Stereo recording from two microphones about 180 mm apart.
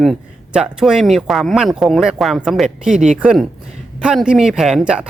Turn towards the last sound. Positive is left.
turn(degrees=-5)  # may be behind; listen again after turning